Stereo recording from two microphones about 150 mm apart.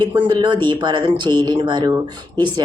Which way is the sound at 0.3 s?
30° right (ahead or behind).